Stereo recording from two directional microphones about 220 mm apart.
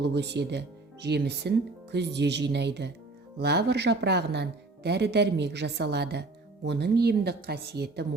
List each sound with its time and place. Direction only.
0.0 s speech: 50° right (ahead or behind)